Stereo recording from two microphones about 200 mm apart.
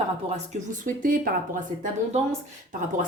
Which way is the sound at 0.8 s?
45° right (ahead or behind).